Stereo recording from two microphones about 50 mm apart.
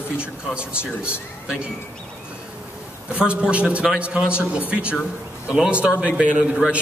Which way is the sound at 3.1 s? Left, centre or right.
Right.